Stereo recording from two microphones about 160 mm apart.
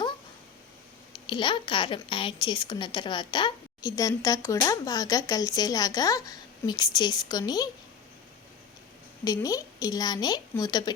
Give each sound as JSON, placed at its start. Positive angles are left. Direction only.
{"t": 1.3, "sound": "a woman's voice", "side_deg": 30}
{"t": 9.2, "sound": "a woman's voice", "side_deg": 25}